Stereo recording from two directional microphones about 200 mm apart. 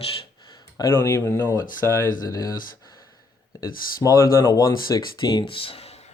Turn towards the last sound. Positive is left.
turn(degrees=30)  # may be behind; listen again after turning